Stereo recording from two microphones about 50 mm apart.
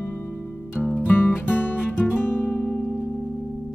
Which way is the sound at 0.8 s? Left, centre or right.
Centre.